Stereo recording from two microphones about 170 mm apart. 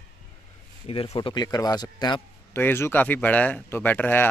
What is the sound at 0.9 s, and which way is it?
Speech, 35° left (ahead or behind).